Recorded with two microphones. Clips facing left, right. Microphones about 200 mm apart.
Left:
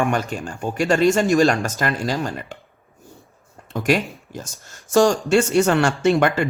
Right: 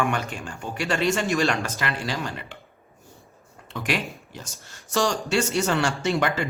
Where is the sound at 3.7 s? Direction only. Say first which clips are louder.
Left 8 dB; 45° left (ahead or behind).